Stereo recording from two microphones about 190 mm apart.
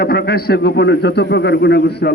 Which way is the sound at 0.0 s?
55° left (ahead or behind).